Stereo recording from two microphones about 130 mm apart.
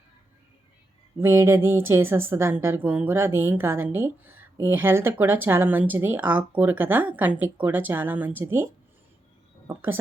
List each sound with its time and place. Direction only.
1.2 s speech: 20° right (ahead or behind)